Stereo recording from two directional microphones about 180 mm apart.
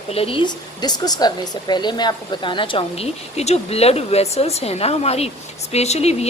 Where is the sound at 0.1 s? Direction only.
30° left (ahead or behind).